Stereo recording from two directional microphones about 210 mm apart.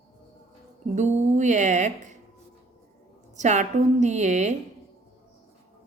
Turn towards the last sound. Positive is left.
turn(degrees=-35)  # may be behind; listen again after turning